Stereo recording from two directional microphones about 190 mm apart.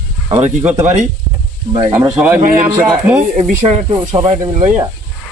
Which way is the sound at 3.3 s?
35° right (ahead or behind).